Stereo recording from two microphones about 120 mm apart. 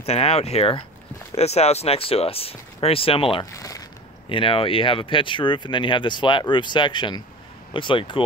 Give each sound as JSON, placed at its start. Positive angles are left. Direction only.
{"t": 0.0, "sound": "speech", "side_deg": 60}
{"t": 3.5, "sound": "speech", "side_deg": 30}
{"t": 4.3, "sound": "speech", "side_deg": 45}